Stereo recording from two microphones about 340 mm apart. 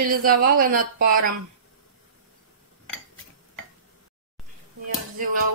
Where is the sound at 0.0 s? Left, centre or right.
Right.